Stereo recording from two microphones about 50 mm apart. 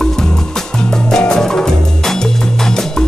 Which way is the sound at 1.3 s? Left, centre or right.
Centre.